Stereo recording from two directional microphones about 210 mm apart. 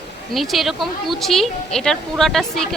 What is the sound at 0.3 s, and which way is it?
A woman's voice, centre (ahead or behind).